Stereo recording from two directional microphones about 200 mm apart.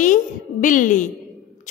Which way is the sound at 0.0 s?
40° left (ahead or behind).